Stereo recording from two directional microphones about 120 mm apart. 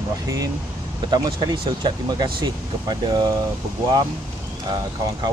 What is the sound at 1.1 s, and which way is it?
Speech, 40° right (ahead or behind).